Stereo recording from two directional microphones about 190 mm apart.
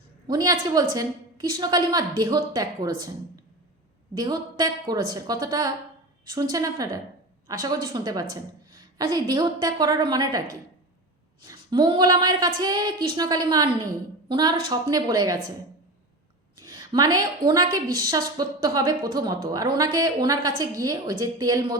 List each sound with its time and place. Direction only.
0.3 s a woman's voice: 20° right (ahead or behind)
4.1 s a woman's voice: 20° right (ahead or behind)
11.4 s a woman's voice: 25° right (ahead or behind)
16.6 s a woman's voice: 20° right (ahead or behind)